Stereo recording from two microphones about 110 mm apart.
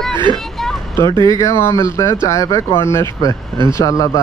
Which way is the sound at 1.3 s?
30° left (ahead or behind).